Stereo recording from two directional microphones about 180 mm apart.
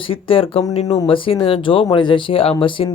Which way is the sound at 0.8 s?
20° left (ahead or behind).